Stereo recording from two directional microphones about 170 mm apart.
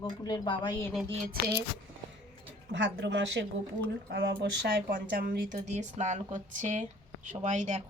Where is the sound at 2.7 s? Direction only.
90° right.